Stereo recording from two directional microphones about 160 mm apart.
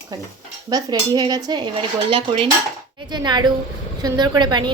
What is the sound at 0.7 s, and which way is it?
A woman's voice, 25° right (ahead or behind).